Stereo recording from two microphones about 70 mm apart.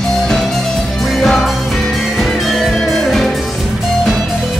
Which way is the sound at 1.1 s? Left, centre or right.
Centre.